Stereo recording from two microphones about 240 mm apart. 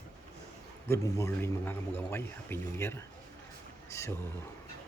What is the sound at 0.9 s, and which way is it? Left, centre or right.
A man's voice, centre.